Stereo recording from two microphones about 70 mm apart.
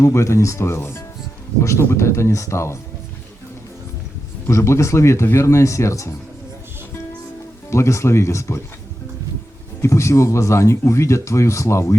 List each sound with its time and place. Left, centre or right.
0.0 s speech: left
4.4 s speech: left
7.7 s speech: left
9.8 s speech: left